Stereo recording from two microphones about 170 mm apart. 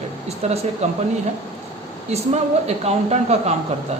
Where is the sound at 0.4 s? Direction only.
40° right (ahead or behind).